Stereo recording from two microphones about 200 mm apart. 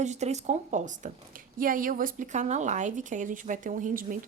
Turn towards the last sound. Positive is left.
turn(degrees=-40)  # may be behind; listen again after turning